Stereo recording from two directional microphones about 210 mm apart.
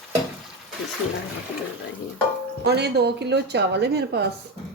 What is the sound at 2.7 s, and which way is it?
Speech, 50° right (ahead or behind).